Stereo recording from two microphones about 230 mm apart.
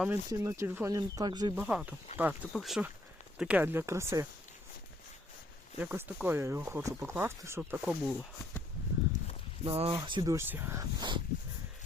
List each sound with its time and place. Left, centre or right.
0.0 s speech: centre
1.5 s speech: centre
5.8 s speech: centre
9.6 s speech: right